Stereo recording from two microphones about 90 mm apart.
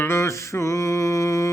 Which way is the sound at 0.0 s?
30° left (ahead or behind).